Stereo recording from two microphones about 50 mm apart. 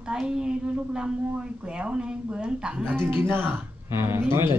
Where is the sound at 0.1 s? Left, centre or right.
Centre.